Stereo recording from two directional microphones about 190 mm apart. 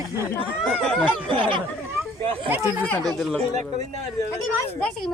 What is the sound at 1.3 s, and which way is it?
Speech, 25° right (ahead or behind).